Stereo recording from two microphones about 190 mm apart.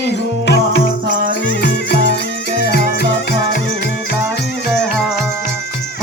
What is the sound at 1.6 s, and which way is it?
Music, 60° left (ahead or behind).